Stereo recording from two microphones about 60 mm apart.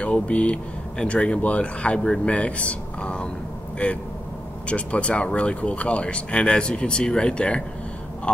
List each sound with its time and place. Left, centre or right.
0.0 s speech: left